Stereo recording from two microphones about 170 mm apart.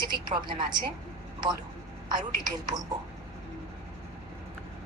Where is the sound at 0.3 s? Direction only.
25° right (ahead or behind).